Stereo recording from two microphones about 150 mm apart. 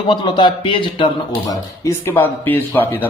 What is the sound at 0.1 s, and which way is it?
Speech, 35° left (ahead or behind).